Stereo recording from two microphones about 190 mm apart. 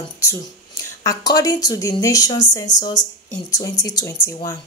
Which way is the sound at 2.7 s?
40° left (ahead or behind).